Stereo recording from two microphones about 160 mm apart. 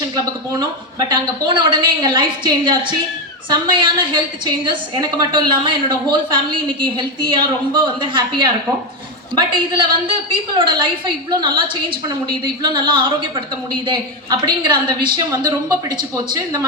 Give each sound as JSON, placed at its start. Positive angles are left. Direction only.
{"t": 0.9, "sound": "a woman's voice", "side_deg": -25}
{"t": 9.7, "sound": "a woman's voice", "side_deg": -30}